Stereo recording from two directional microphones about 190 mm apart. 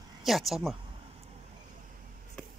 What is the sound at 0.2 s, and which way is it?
Speech, centre (ahead or behind).